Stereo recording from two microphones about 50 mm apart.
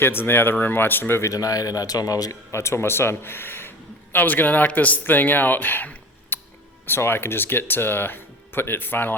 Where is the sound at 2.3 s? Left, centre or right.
Left.